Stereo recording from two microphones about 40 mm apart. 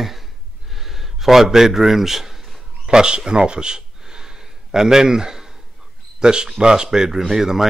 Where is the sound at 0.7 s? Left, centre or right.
Centre.